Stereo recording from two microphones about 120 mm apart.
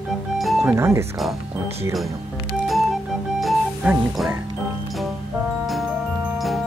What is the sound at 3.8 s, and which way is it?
Speech, 10° right (ahead or behind).